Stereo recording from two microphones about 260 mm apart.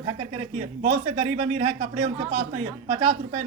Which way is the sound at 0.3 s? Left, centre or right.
Right.